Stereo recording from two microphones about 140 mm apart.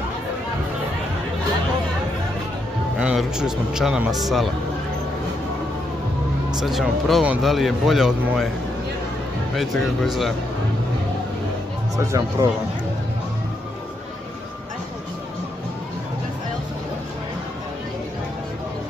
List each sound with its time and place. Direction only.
3.0 s speech: 5° right (ahead or behind)
6.6 s speech: centre (ahead or behind)
9.6 s speech: centre (ahead or behind)
12.0 s speech: 20° right (ahead or behind)